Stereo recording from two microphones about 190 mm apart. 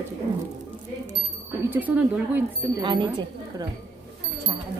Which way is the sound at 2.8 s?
25° right (ahead or behind).